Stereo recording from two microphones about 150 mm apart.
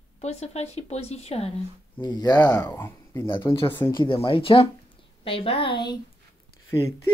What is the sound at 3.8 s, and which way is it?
Speech, 30° left (ahead or behind).